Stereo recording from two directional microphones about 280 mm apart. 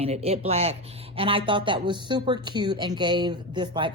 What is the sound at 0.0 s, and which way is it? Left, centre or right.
Speech, right.